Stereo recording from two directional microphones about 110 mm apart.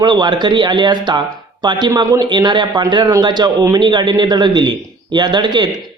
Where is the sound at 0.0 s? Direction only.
40° right (ahead or behind).